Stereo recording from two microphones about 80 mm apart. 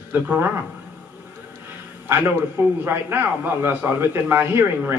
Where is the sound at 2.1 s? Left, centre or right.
Right.